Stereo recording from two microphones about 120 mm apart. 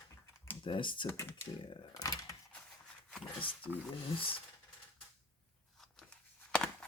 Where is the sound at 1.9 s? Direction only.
30° left (ahead or behind).